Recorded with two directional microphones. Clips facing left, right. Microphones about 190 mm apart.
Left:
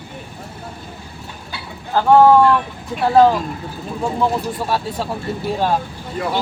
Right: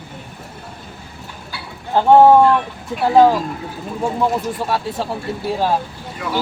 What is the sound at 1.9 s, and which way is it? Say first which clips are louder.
Speech: right 1 dB; 20° right (ahead or behind).